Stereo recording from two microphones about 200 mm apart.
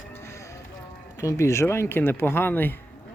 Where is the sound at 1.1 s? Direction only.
15° left (ahead or behind).